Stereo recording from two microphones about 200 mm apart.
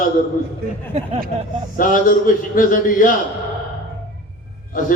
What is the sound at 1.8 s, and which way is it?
A man's voice, 45° left (ahead or behind).